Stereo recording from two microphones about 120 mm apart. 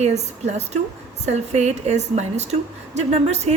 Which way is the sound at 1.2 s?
70° right (ahead or behind).